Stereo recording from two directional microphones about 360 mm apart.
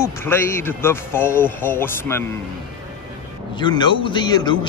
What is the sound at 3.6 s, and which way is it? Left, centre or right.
Speech, centre.